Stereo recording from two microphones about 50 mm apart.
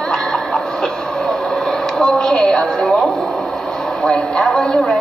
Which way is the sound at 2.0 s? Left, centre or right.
Centre.